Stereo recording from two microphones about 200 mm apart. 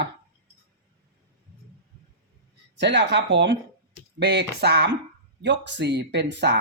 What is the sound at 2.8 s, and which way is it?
Speech, 60° right (ahead or behind).